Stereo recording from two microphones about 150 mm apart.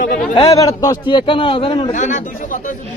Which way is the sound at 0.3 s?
25° left (ahead or behind).